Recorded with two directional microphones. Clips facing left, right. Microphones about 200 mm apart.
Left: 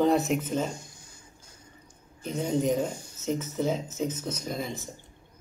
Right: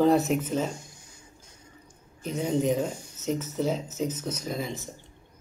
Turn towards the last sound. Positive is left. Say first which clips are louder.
# right 1 dB
turn(degrees=0)  # may be behind; listen again after turning